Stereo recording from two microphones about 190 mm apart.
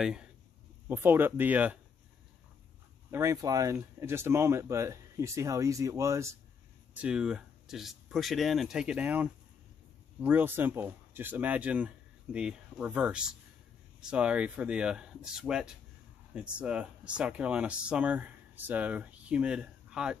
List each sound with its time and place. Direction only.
0.0 s speech: 5° right (ahead or behind)
3.1 s speech: 15° right (ahead or behind)